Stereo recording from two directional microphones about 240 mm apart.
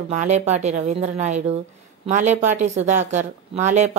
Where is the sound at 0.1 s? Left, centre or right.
Right.